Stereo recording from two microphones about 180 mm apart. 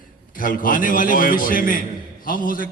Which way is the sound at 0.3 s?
50° left (ahead or behind).